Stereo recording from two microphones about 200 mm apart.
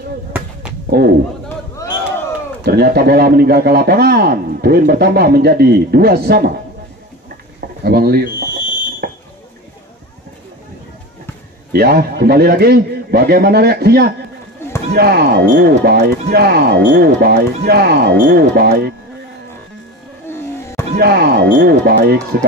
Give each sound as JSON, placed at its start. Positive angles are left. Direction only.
{"t": 0.8, "sound": "speech", "side_deg": -50}
{"t": 2.6, "sound": "a man's voice", "side_deg": -50}
{"t": 7.8, "sound": "speech", "side_deg": -50}
{"t": 9.0, "sound": "a sound", "side_deg": -55}
{"t": 11.7, "sound": "a man's voice", "side_deg": -50}
{"t": 20.2, "sound": "a sound", "side_deg": 15}
{"t": 20.9, "sound": "a man's voice", "side_deg": -50}